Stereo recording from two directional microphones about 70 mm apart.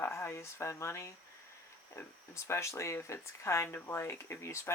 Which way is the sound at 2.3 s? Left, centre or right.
Left.